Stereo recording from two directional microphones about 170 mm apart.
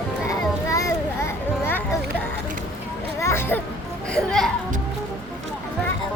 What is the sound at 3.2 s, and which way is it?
Music, 15° left (ahead or behind).